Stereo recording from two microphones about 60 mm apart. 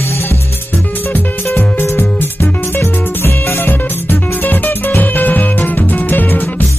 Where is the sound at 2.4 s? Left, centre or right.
Left.